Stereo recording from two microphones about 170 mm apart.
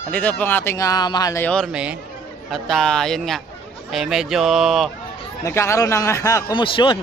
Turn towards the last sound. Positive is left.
turn(degrees=30)  # may be behind; listen again after turning